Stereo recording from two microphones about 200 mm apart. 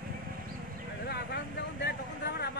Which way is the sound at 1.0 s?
55° left (ahead or behind).